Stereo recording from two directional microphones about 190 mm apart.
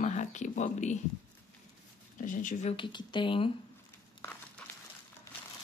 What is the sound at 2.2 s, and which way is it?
Speech, 45° left (ahead or behind).